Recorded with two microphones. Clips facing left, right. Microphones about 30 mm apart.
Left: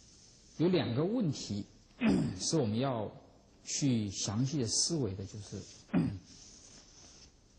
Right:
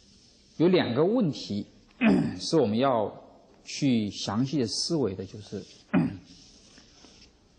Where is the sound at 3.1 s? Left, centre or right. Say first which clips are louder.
Right 9 dB; right.